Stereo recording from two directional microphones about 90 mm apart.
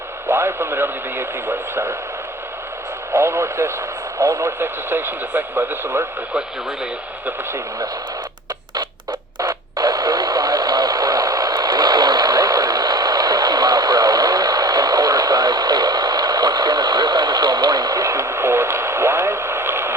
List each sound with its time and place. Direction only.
0.3 s speech: 25° right (ahead or behind)
3.1 s speech: 30° right (ahead or behind)
9.4 s radio: 45° right (ahead or behind); by 19.9 s 25° right (ahead or behind)